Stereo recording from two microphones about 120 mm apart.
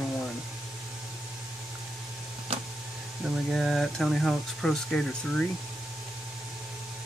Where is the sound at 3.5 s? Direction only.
5° left (ahead or behind).